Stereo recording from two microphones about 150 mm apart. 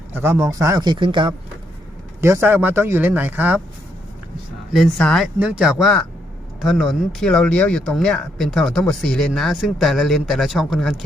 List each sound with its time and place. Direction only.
0.1 s speech: 15° right (ahead or behind); by 1.3 s 35° right (ahead or behind)
2.2 s speech: 15° right (ahead or behind)
4.7 s speech: centre (ahead or behind)
5.4 s speech: 5° right (ahead or behind)